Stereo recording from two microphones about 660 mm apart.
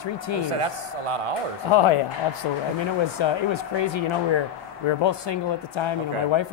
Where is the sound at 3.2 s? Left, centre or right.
Left.